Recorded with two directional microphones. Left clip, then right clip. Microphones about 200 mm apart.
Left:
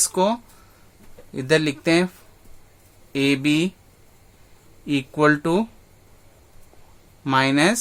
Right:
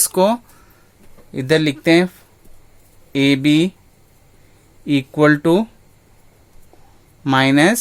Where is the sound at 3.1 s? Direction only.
30° right (ahead or behind).